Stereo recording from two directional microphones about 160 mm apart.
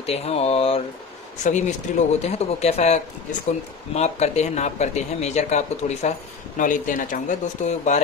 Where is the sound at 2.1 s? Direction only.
40° left (ahead or behind).